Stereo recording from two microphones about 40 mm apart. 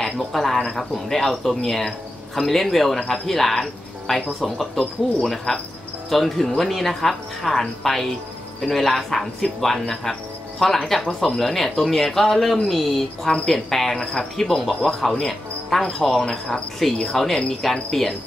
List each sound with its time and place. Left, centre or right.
0.0 s speech: centre
0.6 s cricket: centre
1.9 s speech: centre
3.0 s cricket: centre
4.1 s speech: centre
4.7 s cricket: centre
6.7 s speech: centre
13.3 s cricket: centre
15.0 s speech: centre
17.0 s cricket: centre
17.6 s speech: centre